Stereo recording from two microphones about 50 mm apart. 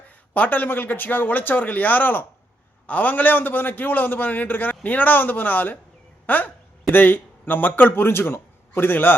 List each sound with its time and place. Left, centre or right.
0.3 s a man's voice: left